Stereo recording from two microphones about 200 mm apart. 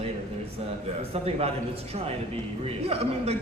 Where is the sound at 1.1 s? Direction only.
30° right (ahead or behind).